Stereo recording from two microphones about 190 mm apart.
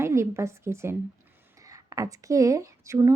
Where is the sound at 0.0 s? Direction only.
15° right (ahead or behind).